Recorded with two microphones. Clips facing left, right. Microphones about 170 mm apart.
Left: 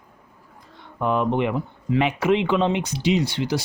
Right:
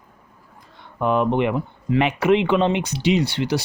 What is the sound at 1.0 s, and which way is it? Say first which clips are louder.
Speech: right 2 dB; 65° right (ahead or behind).